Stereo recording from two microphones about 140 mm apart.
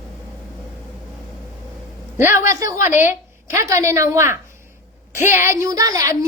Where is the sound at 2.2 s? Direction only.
15° right (ahead or behind).